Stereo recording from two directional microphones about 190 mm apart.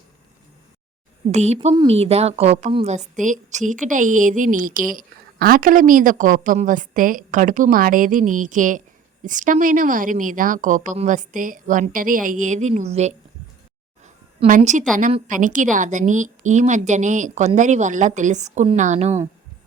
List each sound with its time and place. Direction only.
1.3 s a woman's voice: 35° right (ahead or behind)
14.0 s a sound: 40° right (ahead or behind)
15.3 s a woman's voice: 45° right (ahead or behind)